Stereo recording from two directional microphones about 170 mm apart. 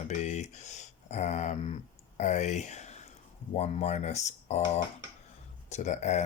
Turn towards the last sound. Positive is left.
turn(degrees=45)  # may be behind; listen again after turning